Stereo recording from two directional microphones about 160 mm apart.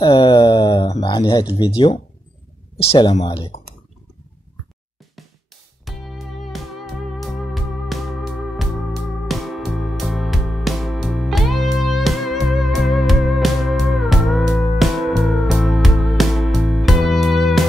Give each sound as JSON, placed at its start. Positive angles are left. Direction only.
{"t": 0.1, "sound": "a sound", "side_deg": 30}
{"t": 1.0, "sound": "speech", "side_deg": 30}
{"t": 5.9, "sound": "music", "side_deg": 0}